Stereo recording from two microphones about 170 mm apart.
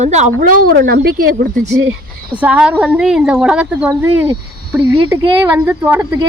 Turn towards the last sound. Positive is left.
turn(degrees=-10)  # may be behind; listen again after turning